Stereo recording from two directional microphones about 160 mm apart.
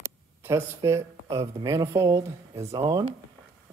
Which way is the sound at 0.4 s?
15° right (ahead or behind).